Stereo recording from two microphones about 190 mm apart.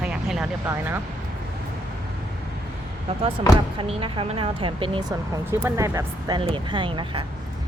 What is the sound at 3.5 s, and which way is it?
Speech, 30° right (ahead or behind).